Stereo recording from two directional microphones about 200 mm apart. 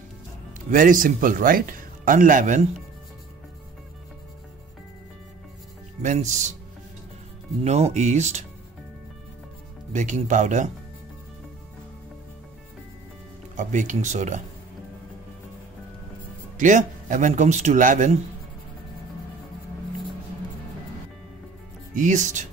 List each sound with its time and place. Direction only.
0.7 s speech: 40° right (ahead or behind)
6.0 s speech: 35° right (ahead or behind)
7.6 s speech: 35° right (ahead or behind)
9.9 s speech: 40° right (ahead or behind)
13.6 s speech: 40° right (ahead or behind)
16.5 s speech: 40° right (ahead or behind)
21.9 s speech: 40° right (ahead or behind)